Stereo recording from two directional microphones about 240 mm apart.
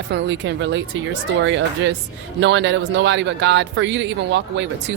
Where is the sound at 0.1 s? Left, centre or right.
Right.